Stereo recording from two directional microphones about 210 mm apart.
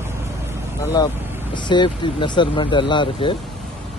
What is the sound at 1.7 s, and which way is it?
Speech, 20° left (ahead or behind).